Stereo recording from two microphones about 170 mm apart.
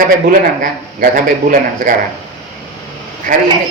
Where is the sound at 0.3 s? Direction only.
55° right (ahead or behind).